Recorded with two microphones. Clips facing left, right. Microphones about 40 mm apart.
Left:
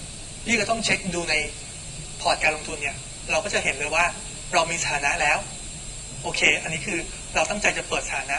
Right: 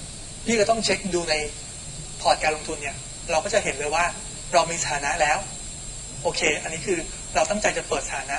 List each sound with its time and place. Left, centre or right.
0.5 s a man's voice: left